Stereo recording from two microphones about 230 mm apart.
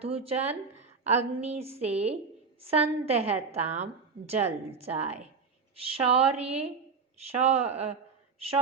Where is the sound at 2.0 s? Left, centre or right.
Right.